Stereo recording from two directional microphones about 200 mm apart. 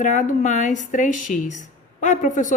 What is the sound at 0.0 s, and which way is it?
Speech, 40° left (ahead or behind).